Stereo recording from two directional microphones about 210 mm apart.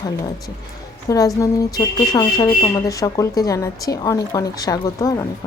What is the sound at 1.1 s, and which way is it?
Speech, 15° left (ahead or behind).